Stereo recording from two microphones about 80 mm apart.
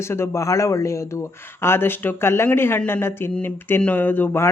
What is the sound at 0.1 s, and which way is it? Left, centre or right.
Speech, left.